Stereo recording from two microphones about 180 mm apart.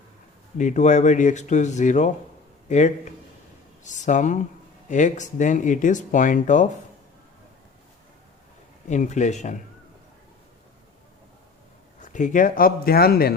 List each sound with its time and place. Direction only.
0.5 s speech: 45° left (ahead or behind)
8.9 s speech: 40° left (ahead or behind)
12.0 s speech: 45° left (ahead or behind)